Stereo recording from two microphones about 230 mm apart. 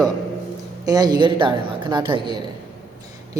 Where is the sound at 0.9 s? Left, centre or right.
Centre.